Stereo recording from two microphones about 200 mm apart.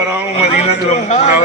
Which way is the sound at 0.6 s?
35° left (ahead or behind).